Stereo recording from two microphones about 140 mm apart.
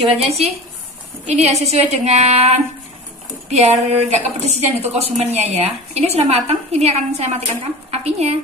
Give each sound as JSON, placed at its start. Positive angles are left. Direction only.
{"t": 0.0, "sound": "a woman's voice", "side_deg": -45}